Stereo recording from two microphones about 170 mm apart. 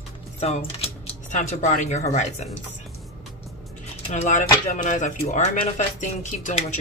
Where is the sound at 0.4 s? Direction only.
35° left (ahead or behind).